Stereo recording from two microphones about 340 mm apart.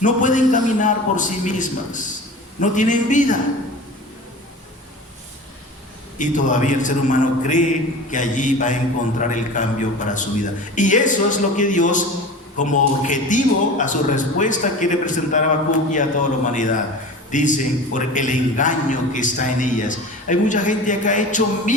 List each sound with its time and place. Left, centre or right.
0.0 s a man's voice: left
6.1 s a man's voice: left